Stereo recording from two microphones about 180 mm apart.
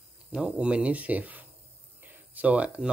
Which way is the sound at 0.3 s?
5° right (ahead or behind).